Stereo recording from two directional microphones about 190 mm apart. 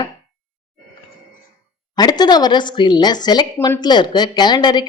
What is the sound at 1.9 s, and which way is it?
A woman's voice, 20° left (ahead or behind).